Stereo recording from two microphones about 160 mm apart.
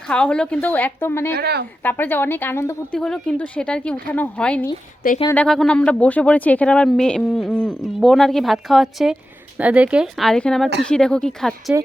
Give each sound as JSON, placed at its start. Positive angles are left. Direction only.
{"t": 0.1, "sound": "a woman's voice", "side_deg": 5}
{"t": 1.4, "sound": "a woman's voice", "side_deg": -90}
{"t": 1.8, "sound": "a woman's voice", "side_deg": 10}
{"t": 3.0, "sound": "a woman's voice", "side_deg": 5}